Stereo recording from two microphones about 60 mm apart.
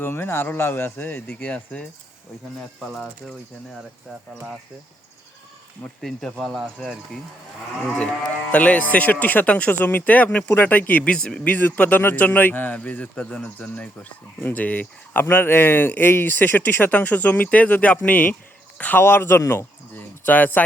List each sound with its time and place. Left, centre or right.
0.0 s a man's voice: left
1.3 s a man's voice: left
2.9 s speech: centre
6.0 s speech: centre
8.5 s a man's voice: left
11.1 s speech: centre
11.4 s a man's voice: left
19.0 s a man's voice: left
19.4 s speech: left
20.2 s a man's voice: left